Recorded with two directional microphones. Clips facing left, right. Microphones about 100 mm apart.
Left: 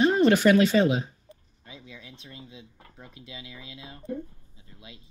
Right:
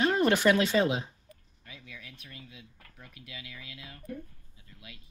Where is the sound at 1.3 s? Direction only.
25° left (ahead or behind).